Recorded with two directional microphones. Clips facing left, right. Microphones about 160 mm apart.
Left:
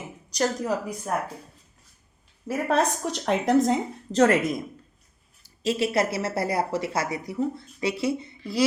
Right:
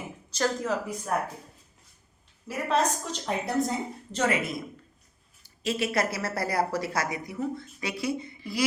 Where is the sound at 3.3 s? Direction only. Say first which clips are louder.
Left 7 dB; 90° left.